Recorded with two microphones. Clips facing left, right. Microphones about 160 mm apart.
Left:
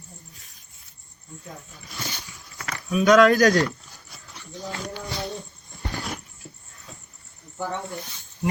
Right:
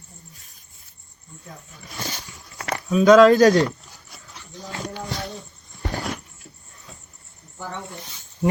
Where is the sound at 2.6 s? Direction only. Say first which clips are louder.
Right 4 dB; 30° right (ahead or behind).